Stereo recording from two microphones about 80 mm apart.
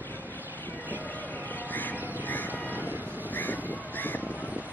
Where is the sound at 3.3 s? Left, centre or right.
Left.